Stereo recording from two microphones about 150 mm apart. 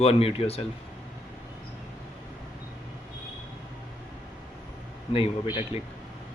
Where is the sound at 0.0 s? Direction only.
40° left (ahead or behind).